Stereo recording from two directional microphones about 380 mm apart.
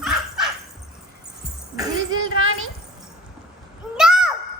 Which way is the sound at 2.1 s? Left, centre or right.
Right.